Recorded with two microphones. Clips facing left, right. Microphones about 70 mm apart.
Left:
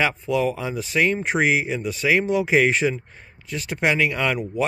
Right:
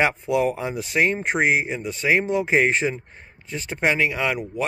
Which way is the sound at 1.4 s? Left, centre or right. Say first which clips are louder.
Even; right.